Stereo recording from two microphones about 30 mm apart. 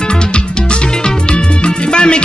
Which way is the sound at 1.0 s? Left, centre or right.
Left.